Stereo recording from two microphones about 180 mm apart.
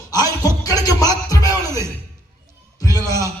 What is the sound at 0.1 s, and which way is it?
Music, 20° left (ahead or behind).